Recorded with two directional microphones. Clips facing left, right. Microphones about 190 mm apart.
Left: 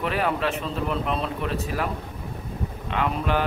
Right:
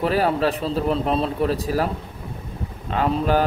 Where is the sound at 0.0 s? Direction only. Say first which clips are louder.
Right 5 dB; 35° right (ahead or behind).